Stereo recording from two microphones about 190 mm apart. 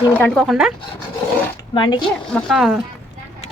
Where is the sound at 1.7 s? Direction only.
25° left (ahead or behind).